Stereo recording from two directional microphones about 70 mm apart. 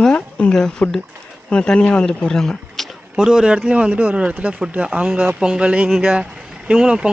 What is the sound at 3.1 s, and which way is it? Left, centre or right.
Speech, centre.